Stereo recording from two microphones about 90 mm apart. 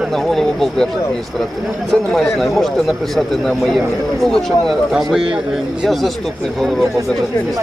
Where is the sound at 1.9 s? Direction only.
5° left (ahead or behind).